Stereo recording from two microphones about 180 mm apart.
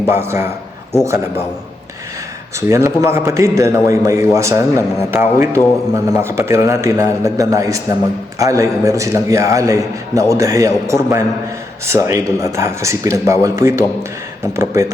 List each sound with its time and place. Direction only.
0.1 s a man's voice: 15° right (ahead or behind)
2.6 s a man's voice: 15° right (ahead or behind)